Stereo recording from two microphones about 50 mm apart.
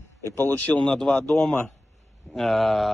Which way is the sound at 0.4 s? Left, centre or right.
Left.